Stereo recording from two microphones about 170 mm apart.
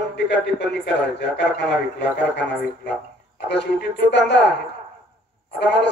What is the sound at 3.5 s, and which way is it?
A man's voice, 90° left.